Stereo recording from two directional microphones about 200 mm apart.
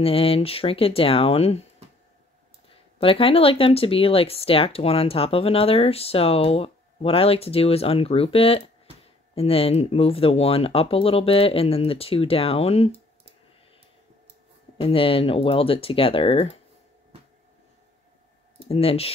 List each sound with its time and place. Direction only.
0.0 s speech: 30° left (ahead or behind)
3.0 s speech: 25° left (ahead or behind)
14.8 s speech: 25° left (ahead or behind)
18.7 s speech: 30° left (ahead or behind)